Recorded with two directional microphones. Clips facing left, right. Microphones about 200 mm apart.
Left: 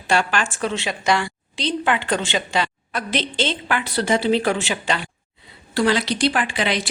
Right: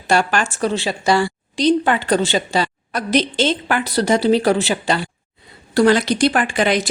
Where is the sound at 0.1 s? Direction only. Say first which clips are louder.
Right 3 dB; 40° right (ahead or behind).